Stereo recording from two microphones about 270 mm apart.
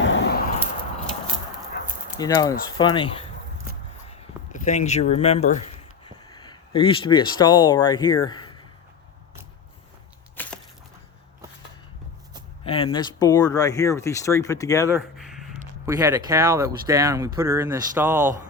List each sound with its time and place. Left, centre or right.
0.0 s keys jangling: left
2.1 s speech: centre
10.4 s splinter: centre
12.6 s speech: left
14.8 s a sound: centre
16.0 s speech: centre